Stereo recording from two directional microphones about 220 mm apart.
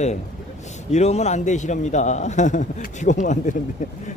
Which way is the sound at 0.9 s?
30° left (ahead or behind).